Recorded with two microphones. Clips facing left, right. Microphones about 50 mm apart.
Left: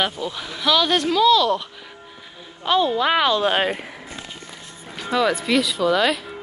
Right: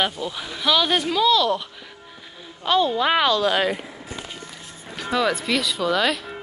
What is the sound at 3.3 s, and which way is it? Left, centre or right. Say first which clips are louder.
Speech: left 1 dB; left.